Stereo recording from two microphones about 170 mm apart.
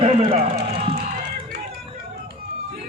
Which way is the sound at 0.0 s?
30° right (ahead or behind).